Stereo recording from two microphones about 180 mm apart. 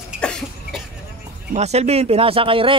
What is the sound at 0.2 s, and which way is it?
Cough, 5° left (ahead or behind).